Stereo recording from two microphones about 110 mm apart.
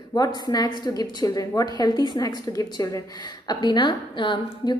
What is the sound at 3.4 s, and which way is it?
A woman's voice, 45° left (ahead or behind).